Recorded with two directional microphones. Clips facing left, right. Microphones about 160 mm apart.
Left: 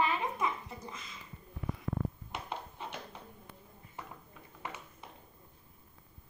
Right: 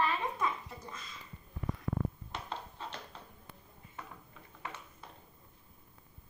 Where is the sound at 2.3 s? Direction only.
15° left (ahead or behind).